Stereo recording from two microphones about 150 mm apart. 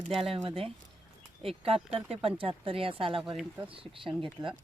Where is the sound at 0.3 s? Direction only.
40° right (ahead or behind).